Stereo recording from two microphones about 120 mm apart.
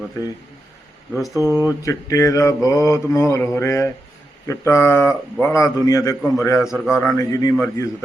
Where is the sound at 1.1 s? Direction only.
Centre (ahead or behind).